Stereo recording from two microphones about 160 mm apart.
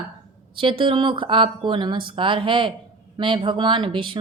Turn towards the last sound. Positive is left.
turn(degrees=-30)  # may be behind; listen again after turning